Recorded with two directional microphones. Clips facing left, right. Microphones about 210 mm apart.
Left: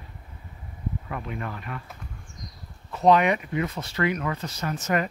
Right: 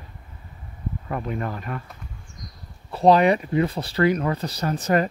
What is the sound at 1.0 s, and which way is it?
Speech, 40° right (ahead or behind).